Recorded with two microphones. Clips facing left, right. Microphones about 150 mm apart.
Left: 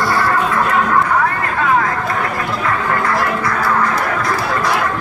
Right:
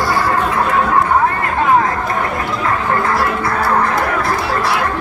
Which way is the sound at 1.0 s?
25° right (ahead or behind).